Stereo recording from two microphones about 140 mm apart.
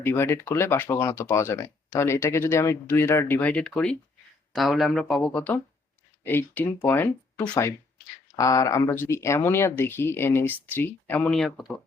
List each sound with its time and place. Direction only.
0.0 s speech: 15° left (ahead or behind)